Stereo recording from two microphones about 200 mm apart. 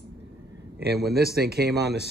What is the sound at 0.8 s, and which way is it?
Speech, 55° right (ahead or behind).